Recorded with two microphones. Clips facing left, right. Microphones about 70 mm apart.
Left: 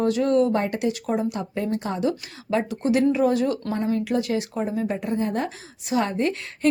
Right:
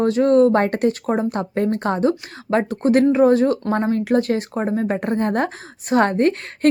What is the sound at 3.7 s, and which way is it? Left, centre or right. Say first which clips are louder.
A woman's voice: right 5 dB; right.